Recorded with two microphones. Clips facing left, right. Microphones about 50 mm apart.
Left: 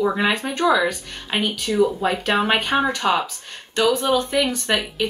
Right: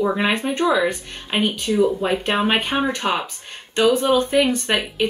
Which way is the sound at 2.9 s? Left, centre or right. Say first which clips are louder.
Left 2 dB; right.